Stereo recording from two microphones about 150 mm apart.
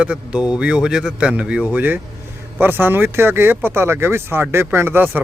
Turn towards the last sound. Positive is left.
turn(degrees=-15)  # may be behind; listen again after turning